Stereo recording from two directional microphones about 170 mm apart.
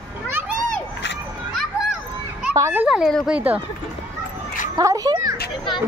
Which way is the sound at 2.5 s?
15° right (ahead or behind).